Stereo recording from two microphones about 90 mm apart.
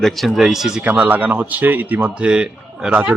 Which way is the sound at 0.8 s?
15° right (ahead or behind).